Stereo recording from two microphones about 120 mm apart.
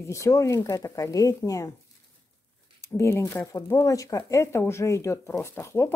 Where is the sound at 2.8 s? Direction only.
25° left (ahead or behind).